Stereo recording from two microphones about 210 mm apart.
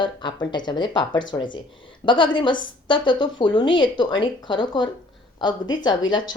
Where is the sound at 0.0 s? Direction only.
20° left (ahead or behind).